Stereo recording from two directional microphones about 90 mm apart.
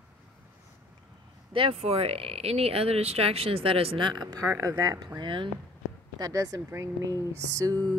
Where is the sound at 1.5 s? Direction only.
90° right; by 4.2 s 60° right (ahead or behind).